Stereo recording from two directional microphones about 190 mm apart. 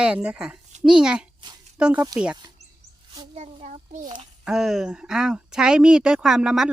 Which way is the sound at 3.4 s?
40° right (ahead or behind).